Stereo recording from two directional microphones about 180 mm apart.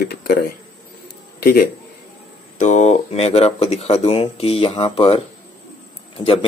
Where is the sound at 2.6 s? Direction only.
40° left (ahead or behind).